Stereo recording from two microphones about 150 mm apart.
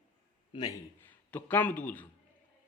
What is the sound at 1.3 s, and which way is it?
Speech, 10° left (ahead or behind).